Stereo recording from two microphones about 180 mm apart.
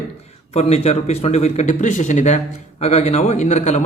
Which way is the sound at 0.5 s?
35° left (ahead or behind).